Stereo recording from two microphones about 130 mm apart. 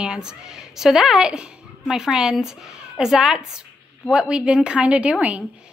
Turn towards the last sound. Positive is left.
turn(degrees=-10)  # may be behind; listen again after turning